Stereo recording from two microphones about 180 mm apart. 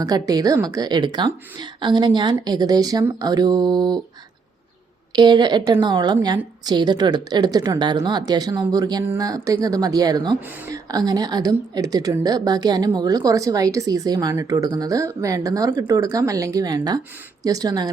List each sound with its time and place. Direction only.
0.0 s a woman's voice: 20° right (ahead or behind)
5.1 s a woman's voice: 25° right (ahead or behind)